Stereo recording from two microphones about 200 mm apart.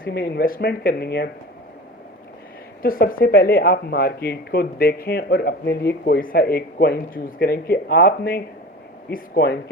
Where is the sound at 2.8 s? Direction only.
45° left (ahead or behind).